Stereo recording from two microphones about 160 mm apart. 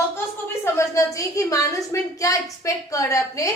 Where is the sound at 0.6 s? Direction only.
20° left (ahead or behind).